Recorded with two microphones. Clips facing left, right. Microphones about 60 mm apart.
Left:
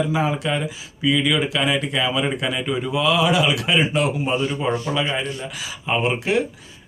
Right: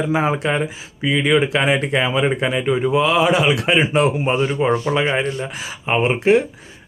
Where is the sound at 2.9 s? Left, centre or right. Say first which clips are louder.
Right 2 dB; right.